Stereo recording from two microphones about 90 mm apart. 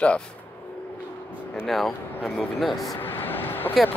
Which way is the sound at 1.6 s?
Centre (ahead or behind).